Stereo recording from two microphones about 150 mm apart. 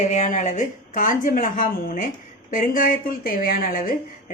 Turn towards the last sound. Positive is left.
turn(degrees=70)  # may be behind; listen again after turning